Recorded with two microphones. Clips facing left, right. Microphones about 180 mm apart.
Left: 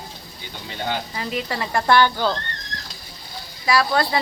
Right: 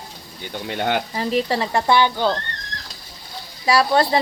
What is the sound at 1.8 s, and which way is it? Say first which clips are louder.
Speech: left 1 dB; 20° right (ahead or behind).